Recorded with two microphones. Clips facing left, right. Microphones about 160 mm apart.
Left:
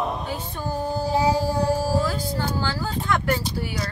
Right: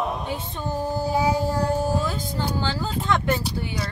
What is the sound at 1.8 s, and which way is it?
Speech, 20° right (ahead or behind).